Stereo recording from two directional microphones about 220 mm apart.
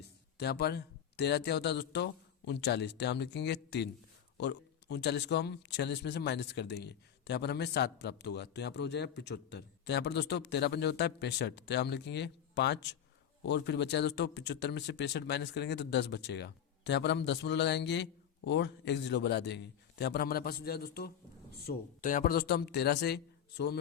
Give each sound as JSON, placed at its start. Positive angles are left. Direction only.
{"t": 0.3, "sound": "a man's voice", "side_deg": 50}